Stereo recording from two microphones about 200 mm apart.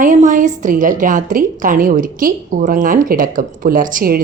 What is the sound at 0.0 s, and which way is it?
A woman's voice, 40° right (ahead or behind).